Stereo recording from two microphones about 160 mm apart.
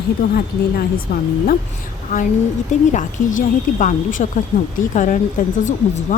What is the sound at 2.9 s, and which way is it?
Speech, 50° left (ahead or behind).